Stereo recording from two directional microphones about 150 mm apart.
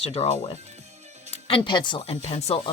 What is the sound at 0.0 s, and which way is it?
Speech, 40° left (ahead or behind).